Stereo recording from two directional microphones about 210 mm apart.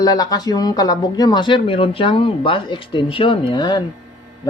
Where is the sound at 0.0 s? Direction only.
15° left (ahead or behind).